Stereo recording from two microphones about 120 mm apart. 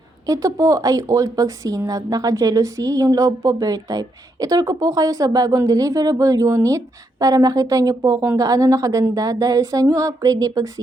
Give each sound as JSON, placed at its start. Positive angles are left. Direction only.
{"t": 0.3, "sound": "speech", "side_deg": -30}